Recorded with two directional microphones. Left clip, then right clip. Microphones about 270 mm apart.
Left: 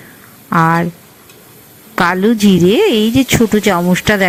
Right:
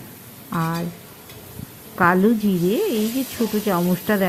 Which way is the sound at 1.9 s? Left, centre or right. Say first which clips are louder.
Left 5 dB; left.